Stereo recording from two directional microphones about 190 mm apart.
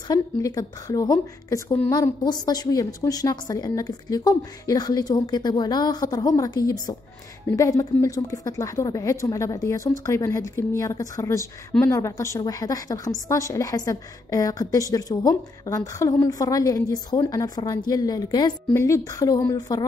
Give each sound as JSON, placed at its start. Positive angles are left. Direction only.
{"t": 0.1, "sound": "a woman's voice", "side_deg": 20}